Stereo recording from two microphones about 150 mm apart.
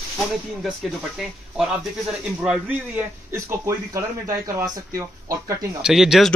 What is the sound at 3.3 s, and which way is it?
Speech, 20° right (ahead or behind).